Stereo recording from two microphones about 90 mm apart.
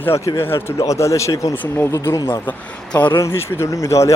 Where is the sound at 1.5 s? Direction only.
20° left (ahead or behind).